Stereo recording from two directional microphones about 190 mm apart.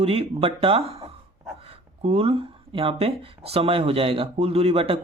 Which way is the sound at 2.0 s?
30° right (ahead or behind).